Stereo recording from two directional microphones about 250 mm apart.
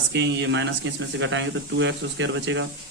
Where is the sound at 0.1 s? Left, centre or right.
Right.